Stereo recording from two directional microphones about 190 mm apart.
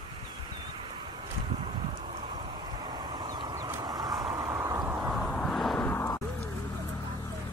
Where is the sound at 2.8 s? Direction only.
20° right (ahead or behind); by 6.2 s 15° left (ahead or behind).